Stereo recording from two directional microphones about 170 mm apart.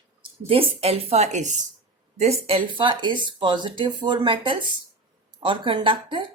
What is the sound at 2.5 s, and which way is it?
Speech, 30° right (ahead or behind).